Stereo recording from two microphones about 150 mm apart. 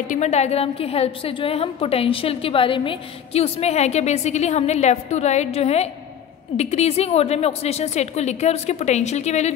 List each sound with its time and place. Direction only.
0.1 s a woman's voice: 50° left (ahead or behind)